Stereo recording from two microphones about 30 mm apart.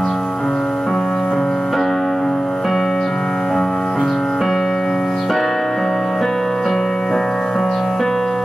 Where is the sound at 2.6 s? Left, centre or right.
Centre.